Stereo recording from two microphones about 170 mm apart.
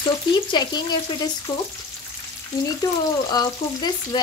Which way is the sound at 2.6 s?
20° left (ahead or behind).